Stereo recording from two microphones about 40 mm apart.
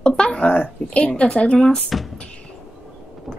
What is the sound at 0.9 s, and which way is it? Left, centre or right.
Speech, left.